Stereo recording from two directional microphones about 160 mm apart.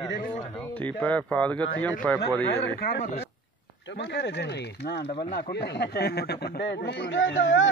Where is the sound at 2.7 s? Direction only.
80° left.